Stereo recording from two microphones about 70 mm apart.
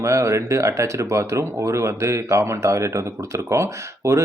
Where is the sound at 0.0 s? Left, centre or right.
Right.